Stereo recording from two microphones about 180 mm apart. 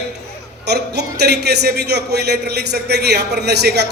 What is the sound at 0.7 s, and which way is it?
A man's voice, 65° right (ahead or behind).